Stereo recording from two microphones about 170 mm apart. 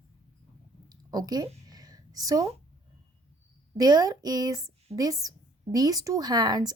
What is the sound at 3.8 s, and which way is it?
A woman's voice, 20° right (ahead or behind).